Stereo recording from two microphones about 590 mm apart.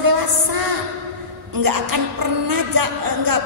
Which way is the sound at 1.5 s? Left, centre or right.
Right.